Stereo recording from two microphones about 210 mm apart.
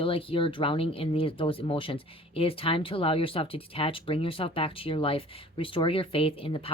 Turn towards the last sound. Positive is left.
turn(degrees=25)  # may be behind; listen again after turning